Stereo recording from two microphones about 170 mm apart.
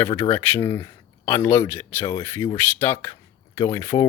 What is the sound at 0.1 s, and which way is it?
Speech, 15° left (ahead or behind).